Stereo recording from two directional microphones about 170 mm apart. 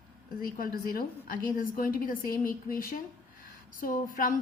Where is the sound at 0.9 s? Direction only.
55° left (ahead or behind).